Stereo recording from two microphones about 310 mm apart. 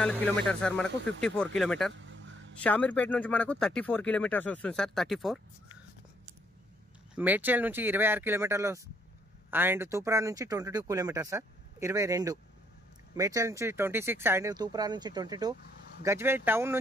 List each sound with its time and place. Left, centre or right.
0.0 s speech: centre
2.0 s music: right
2.6 s speech: centre
7.2 s speech: centre